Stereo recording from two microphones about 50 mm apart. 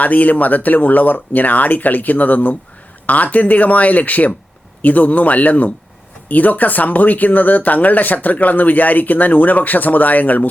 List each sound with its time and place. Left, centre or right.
0.0 s speech: left